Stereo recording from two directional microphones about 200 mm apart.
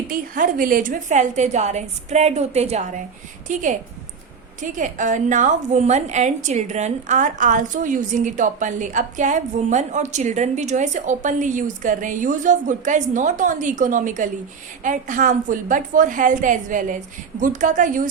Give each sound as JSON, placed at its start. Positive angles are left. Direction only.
{"t": 0.1, "sound": "a woman's voice", "side_deg": -45}